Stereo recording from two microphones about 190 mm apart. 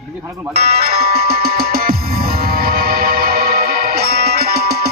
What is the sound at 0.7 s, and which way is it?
Music, 55° right (ahead or behind).